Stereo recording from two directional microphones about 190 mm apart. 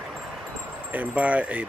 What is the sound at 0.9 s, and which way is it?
Speech, 10° right (ahead or behind).